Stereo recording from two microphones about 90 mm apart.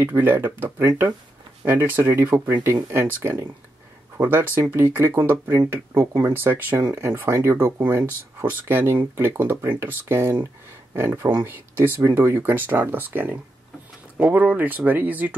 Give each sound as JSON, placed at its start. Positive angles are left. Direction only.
{"t": 0.0, "sound": "speech", "side_deg": -25}